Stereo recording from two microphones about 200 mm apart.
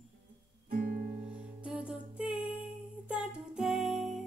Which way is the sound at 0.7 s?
45° right (ahead or behind).